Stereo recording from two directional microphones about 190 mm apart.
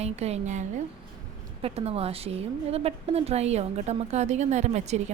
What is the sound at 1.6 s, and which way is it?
A woman's voice, 30° right (ahead or behind).